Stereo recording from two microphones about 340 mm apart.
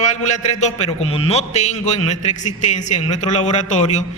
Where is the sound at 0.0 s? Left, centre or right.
Left.